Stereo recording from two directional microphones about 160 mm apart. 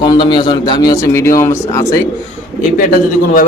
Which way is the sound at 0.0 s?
30° left (ahead or behind).